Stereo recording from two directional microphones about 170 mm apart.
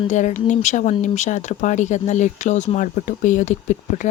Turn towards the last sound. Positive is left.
turn(degrees=45)  # may be behind; listen again after turning